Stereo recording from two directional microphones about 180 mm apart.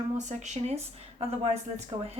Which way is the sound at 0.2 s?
40° right (ahead or behind).